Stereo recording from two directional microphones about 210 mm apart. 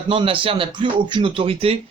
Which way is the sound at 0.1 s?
25° right (ahead or behind).